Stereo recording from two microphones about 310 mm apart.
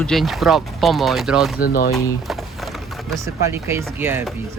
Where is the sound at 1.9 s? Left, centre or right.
Centre.